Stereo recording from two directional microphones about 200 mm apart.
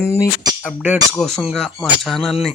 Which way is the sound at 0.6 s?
5° right (ahead or behind).